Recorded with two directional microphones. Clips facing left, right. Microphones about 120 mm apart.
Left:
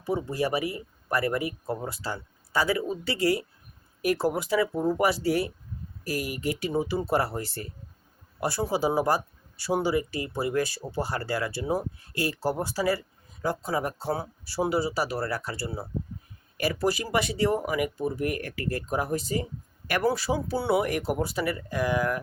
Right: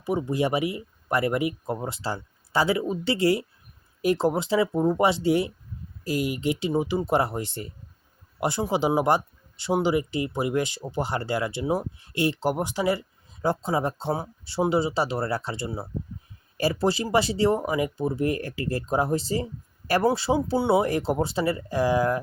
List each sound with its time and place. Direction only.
0.0 s speech: 15° right (ahead or behind)